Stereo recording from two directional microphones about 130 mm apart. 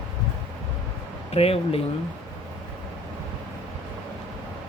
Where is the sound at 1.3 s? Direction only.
50° left (ahead or behind).